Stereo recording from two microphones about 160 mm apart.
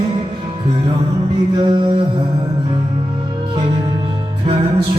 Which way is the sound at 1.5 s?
30° right (ahead or behind).